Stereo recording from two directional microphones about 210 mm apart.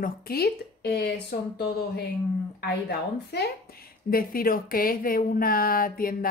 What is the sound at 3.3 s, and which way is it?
Speech, 50° left (ahead or behind).